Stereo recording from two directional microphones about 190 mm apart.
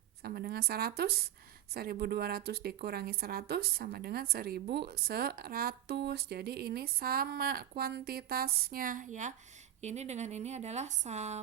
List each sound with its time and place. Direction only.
0.2 s a woman's voice: 55° right (ahead or behind); by 11.3 s 35° right (ahead or behind)